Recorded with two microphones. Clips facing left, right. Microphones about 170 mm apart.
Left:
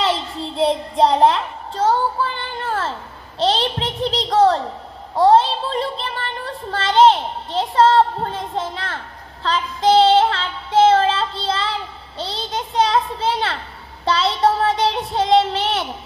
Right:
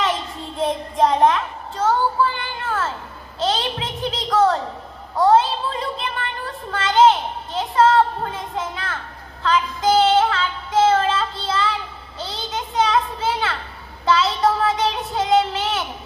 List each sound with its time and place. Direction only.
0.0 s child singing: 30° left (ahead or behind)
3.3 s a sound: 30° left (ahead or behind)
14.0 s child singing: 30° left (ahead or behind)